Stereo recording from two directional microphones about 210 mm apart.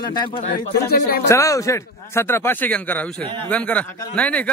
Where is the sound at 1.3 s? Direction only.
15° left (ahead or behind).